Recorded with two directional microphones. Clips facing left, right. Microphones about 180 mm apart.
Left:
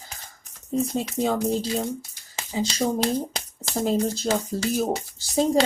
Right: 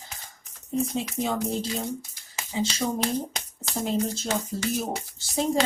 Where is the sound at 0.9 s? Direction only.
35° left (ahead or behind).